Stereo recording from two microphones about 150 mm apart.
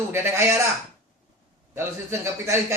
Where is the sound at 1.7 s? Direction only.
15° right (ahead or behind).